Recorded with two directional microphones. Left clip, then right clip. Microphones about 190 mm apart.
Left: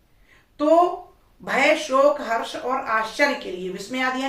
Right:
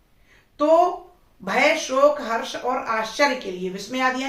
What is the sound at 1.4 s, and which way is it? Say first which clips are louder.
Speech: even; 15° right (ahead or behind).